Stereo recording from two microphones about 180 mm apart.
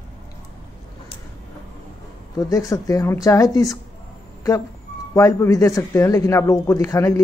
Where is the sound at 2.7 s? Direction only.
20° left (ahead or behind).